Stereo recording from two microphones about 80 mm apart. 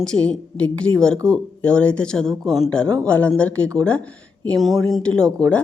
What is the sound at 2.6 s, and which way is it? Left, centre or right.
A woman's voice, centre.